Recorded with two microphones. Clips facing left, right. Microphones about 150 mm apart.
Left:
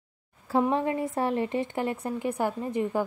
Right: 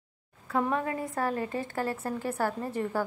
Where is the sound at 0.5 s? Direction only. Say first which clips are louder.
Left 4 dB; 30° left (ahead or behind).